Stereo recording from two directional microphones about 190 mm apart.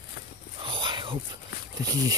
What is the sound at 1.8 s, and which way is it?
Speech, 20° right (ahead or behind).